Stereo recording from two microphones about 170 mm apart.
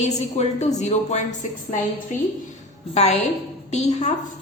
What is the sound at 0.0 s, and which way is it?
A woman's voice, 40° left (ahead or behind).